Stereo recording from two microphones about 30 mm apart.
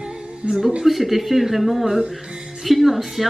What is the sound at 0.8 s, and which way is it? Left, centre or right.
Speech, centre.